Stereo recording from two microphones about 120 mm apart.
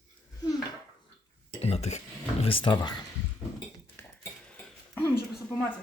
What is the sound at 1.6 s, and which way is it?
Speech, 60° left (ahead or behind).